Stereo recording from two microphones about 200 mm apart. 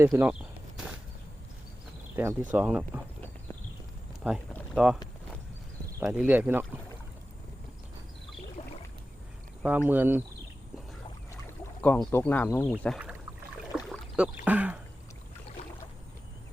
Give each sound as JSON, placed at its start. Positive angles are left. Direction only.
{"t": 0.0, "sound": "speech", "side_deg": -10}
{"t": 2.5, "sound": "speech", "side_deg": -5}
{"t": 4.2, "sound": "speech", "side_deg": -5}
{"t": 6.0, "sound": "speech", "side_deg": -10}
{"t": 8.6, "sound": "rowboat", "side_deg": 30}
{"t": 9.6, "sound": "speech", "side_deg": -10}
{"t": 11.8, "sound": "speech", "side_deg": 10}
{"t": 13.7, "sound": "speech", "side_deg": -5}